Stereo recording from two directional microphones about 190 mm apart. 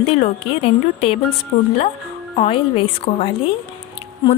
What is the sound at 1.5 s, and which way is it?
Speech, 45° left (ahead or behind).